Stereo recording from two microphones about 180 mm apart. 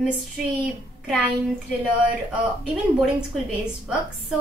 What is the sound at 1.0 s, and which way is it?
Speech, centre (ahead or behind).